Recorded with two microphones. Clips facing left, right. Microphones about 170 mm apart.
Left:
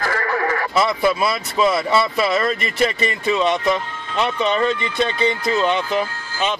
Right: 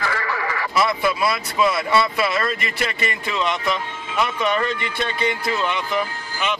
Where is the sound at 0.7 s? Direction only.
25° left (ahead or behind).